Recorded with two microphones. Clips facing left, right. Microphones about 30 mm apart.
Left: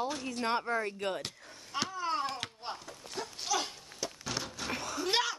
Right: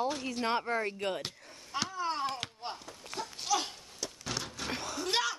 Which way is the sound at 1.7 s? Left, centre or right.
Centre.